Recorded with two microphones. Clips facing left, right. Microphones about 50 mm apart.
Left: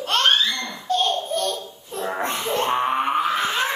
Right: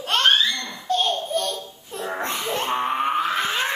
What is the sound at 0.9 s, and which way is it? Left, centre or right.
Laughter, centre.